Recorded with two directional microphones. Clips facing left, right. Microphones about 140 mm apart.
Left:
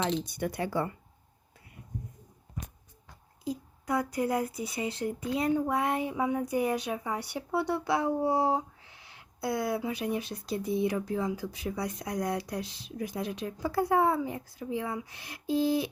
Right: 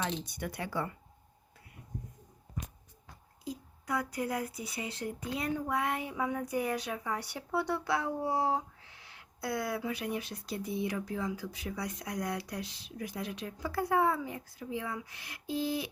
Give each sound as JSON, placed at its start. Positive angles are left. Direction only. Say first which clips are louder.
{"t": 0.0, "sound": "speech", "louder": "left 6 dB", "side_deg": 25}
{"t": 3.4, "sound": "speech", "louder": "left 6 dB", "side_deg": 30}